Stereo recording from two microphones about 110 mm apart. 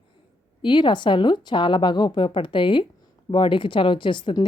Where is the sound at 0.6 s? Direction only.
45° left (ahead or behind).